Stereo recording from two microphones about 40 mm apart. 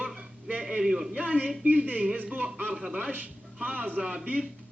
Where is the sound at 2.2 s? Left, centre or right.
Right.